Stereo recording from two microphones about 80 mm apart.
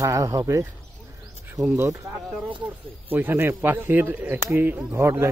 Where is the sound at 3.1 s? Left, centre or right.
Right.